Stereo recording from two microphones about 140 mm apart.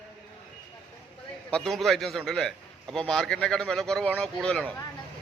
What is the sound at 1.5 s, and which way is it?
A man's voice, 5° left (ahead or behind).